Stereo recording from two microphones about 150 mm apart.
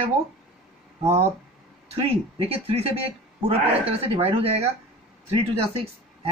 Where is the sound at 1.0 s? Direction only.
40° right (ahead or behind).